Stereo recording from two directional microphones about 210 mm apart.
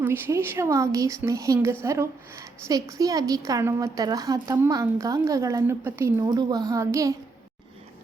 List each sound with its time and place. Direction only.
0.0 s a woman's voice: 10° right (ahead or behind)